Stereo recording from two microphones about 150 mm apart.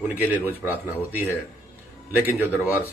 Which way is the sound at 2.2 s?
15° left (ahead or behind).